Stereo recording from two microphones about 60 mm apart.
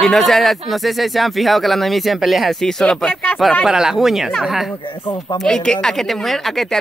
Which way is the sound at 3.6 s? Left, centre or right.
Centre.